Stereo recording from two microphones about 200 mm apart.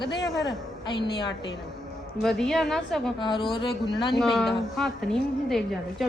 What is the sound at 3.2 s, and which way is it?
Speech, 25° left (ahead or behind).